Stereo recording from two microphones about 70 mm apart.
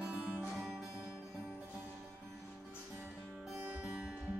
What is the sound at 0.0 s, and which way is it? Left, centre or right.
Music, centre.